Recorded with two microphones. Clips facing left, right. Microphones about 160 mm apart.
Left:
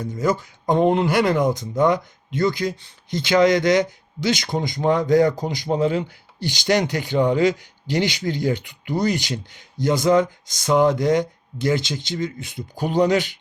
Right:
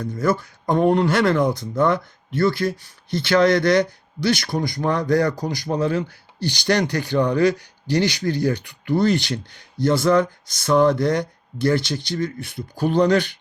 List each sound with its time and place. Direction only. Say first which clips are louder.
0.0 s speech: right 1 dB; 15° left (ahead or behind)